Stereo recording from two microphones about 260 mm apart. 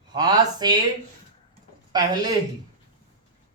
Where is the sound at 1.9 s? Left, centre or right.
Centre.